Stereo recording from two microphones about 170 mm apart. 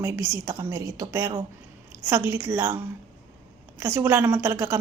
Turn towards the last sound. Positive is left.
turn(degrees=-15)  # may be behind; listen again after turning